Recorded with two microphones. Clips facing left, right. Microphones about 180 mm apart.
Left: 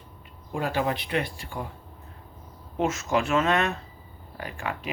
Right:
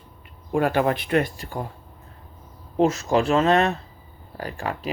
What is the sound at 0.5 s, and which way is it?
Speech, 55° right (ahead or behind).